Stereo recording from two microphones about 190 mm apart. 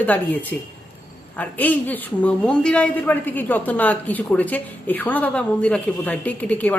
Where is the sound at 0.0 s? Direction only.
10° left (ahead or behind).